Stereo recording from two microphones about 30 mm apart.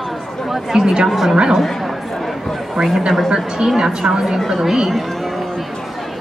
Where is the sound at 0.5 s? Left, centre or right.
Centre.